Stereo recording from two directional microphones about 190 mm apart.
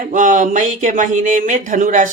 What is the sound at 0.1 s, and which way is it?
Speech, 45° right (ahead or behind).